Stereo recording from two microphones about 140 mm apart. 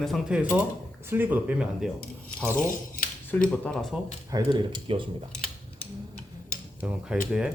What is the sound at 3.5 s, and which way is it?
Speech, 10° left (ahead or behind).